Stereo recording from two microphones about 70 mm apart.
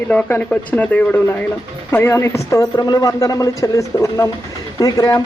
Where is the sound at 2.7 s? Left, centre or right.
Left.